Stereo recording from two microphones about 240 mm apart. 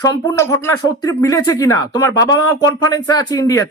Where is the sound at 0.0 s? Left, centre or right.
Centre.